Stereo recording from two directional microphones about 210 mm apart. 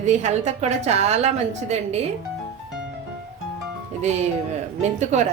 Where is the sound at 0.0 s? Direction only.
35° right (ahead or behind).